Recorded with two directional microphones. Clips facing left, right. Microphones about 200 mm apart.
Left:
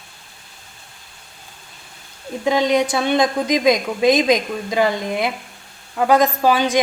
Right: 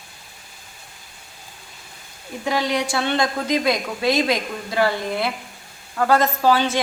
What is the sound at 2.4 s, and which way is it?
A woman's voice, 20° left (ahead or behind).